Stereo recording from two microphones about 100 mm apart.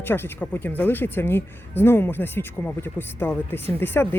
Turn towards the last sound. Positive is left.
turn(degrees=20)  # may be behind; listen again after turning